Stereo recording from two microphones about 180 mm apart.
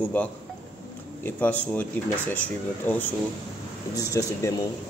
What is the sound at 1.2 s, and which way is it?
Speech, 10° left (ahead or behind).